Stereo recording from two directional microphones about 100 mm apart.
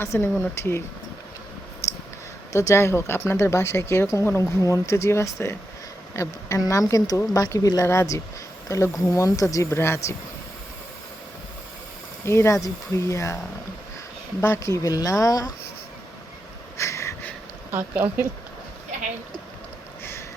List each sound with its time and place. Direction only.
0.0 s speech: 25° left (ahead or behind)
1.8 s scissors: 30° left (ahead or behind)
2.5 s speech: 30° left (ahead or behind)
12.2 s speech: 25° left (ahead or behind)
14.4 s speech: 25° left (ahead or behind)
16.7 s wheeze: 30° left (ahead or behind)
17.7 s speech: 20° right (ahead or behind)